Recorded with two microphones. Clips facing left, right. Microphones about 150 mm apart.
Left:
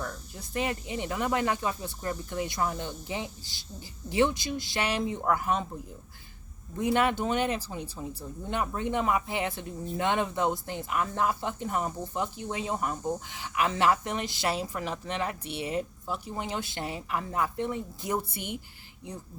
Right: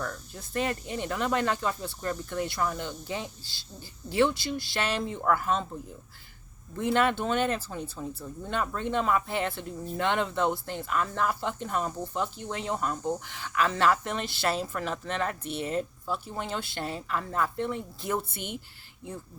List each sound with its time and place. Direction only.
0.5 s speech: 15° left (ahead or behind)
6.7 s speech: 15° left (ahead or behind)